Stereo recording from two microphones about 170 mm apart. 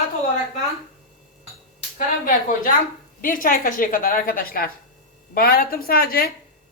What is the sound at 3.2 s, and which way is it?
A woman's voice, 55° left (ahead or behind).